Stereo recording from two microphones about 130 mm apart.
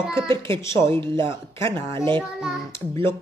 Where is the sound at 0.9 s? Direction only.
40° right (ahead or behind).